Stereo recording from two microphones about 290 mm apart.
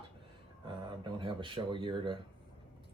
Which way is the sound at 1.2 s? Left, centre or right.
Centre.